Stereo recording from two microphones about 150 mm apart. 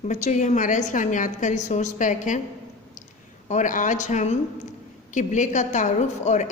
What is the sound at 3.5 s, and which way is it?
A woman's voice, 55° left (ahead or behind).